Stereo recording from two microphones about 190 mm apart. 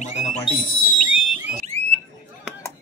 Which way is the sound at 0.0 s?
40° left (ahead or behind).